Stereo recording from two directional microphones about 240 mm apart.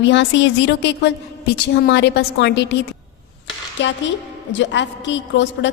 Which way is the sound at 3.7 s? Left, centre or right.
Left.